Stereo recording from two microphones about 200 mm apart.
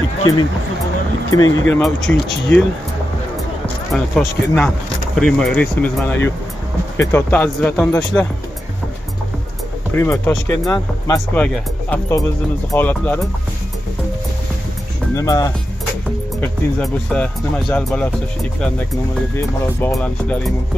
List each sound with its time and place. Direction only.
1.4 s speech: 80° left
1.8 s speech: centre (ahead or behind)
3.9 s speech: centre (ahead or behind)
9.9 s speech: 10° left (ahead or behind)
15.1 s speech: 15° left (ahead or behind)
16.3 s speech: 5° left (ahead or behind)
19.3 s speech: 10° left (ahead or behind)